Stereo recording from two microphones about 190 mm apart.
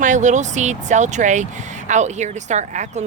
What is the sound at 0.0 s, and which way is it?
Speech, 40° right (ahead or behind).